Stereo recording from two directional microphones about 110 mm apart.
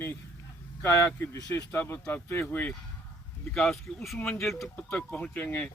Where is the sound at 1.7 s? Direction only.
20° left (ahead or behind).